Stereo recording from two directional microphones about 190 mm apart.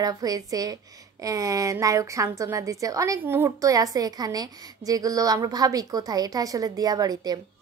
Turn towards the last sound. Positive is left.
turn(degrees=-20)  # may be behind; listen again after turning